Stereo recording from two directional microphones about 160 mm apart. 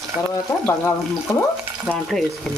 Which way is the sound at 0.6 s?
15° left (ahead or behind).